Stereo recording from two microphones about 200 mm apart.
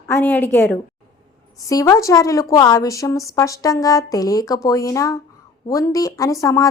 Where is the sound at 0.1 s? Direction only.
10° left (ahead or behind).